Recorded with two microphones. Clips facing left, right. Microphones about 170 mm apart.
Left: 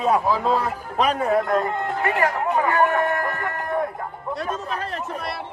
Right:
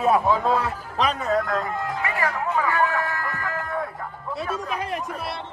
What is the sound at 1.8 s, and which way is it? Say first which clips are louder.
Speech: left 4 dB; 65° left (ahead or behind).